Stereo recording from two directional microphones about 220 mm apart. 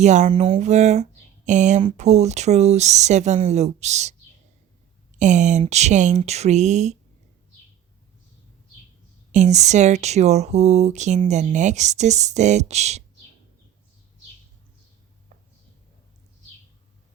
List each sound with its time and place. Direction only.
0.0 s speech: 30° right (ahead or behind)
5.2 s speech: 35° right (ahead or behind)
9.3 s speech: 30° right (ahead or behind)